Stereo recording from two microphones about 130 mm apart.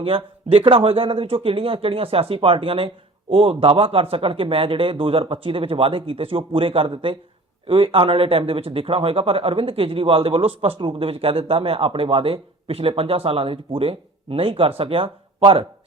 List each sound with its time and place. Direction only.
0.0 s speech: 45° right (ahead or behind)